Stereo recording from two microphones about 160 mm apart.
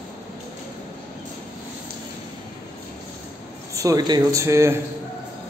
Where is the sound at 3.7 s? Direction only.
20° right (ahead or behind).